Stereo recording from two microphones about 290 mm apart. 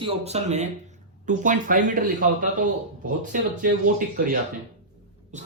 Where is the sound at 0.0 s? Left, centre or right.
Right.